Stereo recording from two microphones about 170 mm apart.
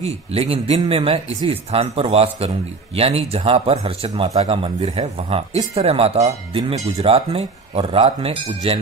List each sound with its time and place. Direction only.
0.0 s speech: 35° right (ahead or behind)